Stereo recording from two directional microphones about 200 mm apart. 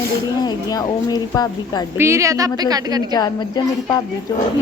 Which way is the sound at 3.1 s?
20° left (ahead or behind).